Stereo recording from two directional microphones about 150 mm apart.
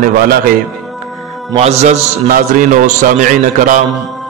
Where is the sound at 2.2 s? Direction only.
65° right (ahead or behind).